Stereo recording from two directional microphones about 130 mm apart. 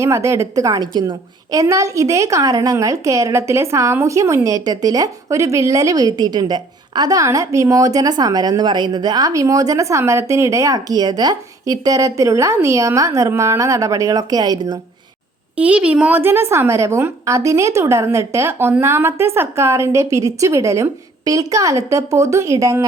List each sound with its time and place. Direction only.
0.0 s a woman's voice: 20° right (ahead or behind)
15.5 s a woman's voice: 10° right (ahead or behind); by 22.9 s 25° right (ahead or behind)